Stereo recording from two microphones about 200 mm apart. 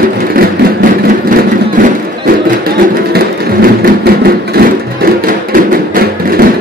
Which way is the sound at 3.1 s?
50° right (ahead or behind).